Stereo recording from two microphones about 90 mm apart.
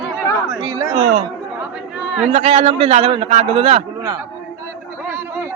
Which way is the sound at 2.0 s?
5° right (ahead or behind).